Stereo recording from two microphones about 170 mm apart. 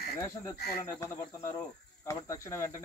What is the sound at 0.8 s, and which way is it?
Speech, 15° left (ahead or behind).